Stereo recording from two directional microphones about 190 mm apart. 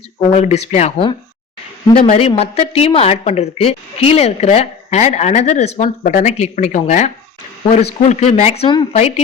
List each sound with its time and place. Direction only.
0.2 s a woman's voice: 35° left (ahead or behind)